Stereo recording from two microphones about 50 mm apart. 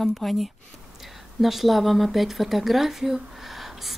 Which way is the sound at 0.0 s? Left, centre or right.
Centre.